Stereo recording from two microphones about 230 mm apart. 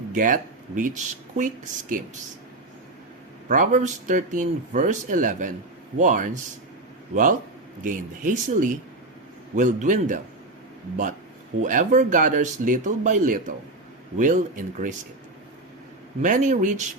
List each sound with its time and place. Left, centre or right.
0.1 s speech: right
3.5 s speech: right
11.6 s speech: right
16.2 s speech: right